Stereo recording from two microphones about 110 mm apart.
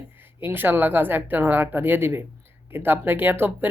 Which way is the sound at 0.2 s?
20° right (ahead or behind).